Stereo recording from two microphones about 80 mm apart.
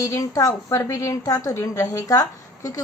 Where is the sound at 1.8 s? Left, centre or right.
Left.